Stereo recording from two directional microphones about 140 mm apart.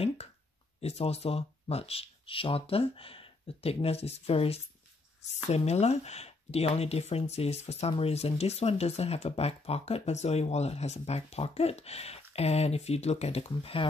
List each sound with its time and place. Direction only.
0.7 s speech: 45° left (ahead or behind)